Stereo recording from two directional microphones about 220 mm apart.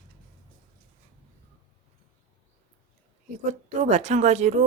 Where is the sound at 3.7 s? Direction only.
30° right (ahead or behind).